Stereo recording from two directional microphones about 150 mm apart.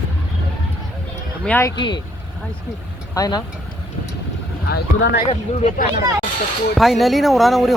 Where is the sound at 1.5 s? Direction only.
15° left (ahead or behind).